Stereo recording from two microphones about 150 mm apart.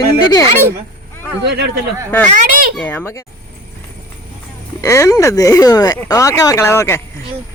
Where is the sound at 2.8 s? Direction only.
10° left (ahead or behind).